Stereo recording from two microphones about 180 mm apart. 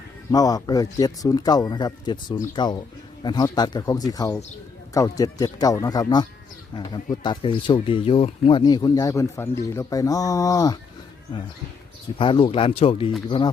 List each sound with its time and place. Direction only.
0.3 s speech: 20° left (ahead or behind)
12.1 s speech: 30° left (ahead or behind)